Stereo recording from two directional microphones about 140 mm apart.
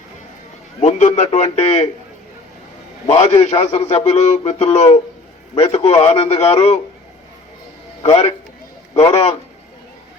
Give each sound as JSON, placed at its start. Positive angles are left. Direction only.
{"t": 0.8, "sound": "a man's voice", "side_deg": 60}
{"t": 3.1, "sound": "a man's voice", "side_deg": 50}
{"t": 8.0, "sound": "a man's voice", "side_deg": 45}